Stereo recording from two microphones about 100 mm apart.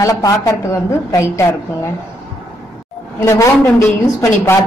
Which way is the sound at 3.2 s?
30° left (ahead or behind).